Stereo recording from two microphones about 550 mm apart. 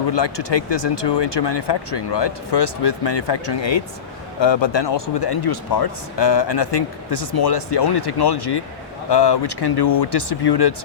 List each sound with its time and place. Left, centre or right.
0.1 s speech: left